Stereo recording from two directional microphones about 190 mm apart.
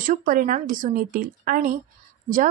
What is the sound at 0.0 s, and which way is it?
A woman's voice, 45° right (ahead or behind).